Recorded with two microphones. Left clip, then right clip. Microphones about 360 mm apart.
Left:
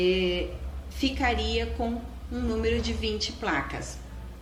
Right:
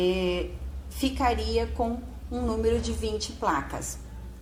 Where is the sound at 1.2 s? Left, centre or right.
Centre.